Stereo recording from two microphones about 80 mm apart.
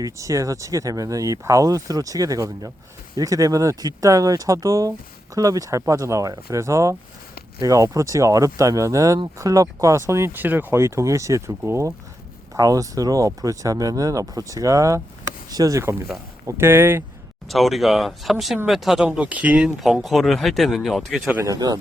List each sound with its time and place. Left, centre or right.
0.0 s speech: right
16.6 s speech: right
17.5 s speech: centre
19.0 s speech: centre
19.8 s speech: centre
21.4 s speech: right